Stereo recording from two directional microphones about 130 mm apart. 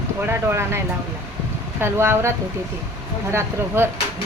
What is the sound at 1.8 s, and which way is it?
Speech, 20° right (ahead or behind).